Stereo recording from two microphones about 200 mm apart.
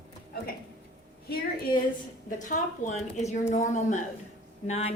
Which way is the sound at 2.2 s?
40° left (ahead or behind).